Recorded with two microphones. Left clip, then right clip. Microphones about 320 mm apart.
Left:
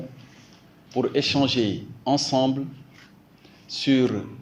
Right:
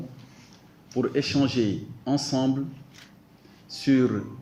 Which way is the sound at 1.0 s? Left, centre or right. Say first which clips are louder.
Left 3 dB; centre.